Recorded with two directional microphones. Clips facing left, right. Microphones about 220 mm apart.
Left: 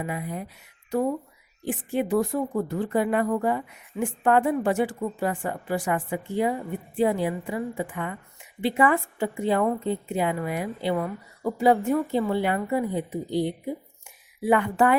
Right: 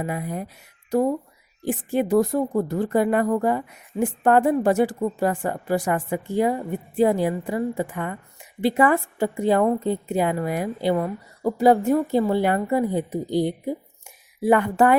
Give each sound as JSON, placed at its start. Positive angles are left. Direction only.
{"t": 0.0, "sound": "speech", "side_deg": -45}